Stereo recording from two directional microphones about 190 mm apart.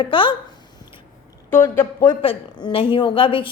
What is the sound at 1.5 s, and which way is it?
Speech, 15° left (ahead or behind).